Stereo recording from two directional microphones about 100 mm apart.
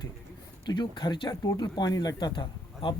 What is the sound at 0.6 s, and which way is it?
Speech, 50° left (ahead or behind).